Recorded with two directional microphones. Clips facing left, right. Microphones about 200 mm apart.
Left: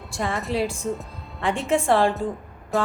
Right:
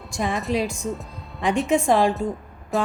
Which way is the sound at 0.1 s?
15° right (ahead or behind).